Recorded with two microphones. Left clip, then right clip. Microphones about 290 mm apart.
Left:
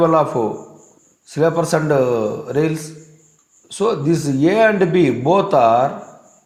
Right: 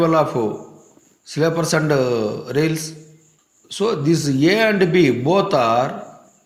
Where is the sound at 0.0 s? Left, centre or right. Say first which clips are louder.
Left 2 dB; centre.